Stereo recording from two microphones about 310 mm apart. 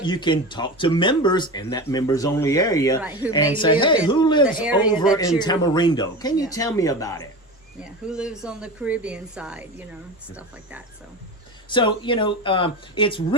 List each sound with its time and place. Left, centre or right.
0.0 s speech: centre
3.2 s speech: centre
3.6 s speech: centre
4.4 s speech: centre
5.4 s speech: centre
8.0 s speech: centre
11.7 s speech: centre